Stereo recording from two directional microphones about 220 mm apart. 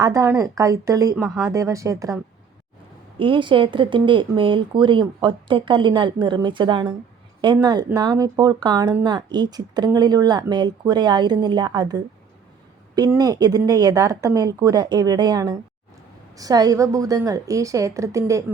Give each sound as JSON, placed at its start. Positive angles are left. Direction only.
{"t": 0.0, "sound": "speech", "side_deg": -15}
{"t": 1.1, "sound": "speech", "side_deg": -5}
{"t": 1.5, "sound": "speech", "side_deg": -15}
{"t": 3.2, "sound": "speech", "side_deg": -20}